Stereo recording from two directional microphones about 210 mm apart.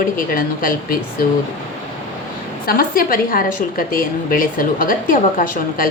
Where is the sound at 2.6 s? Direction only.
45° left (ahead or behind).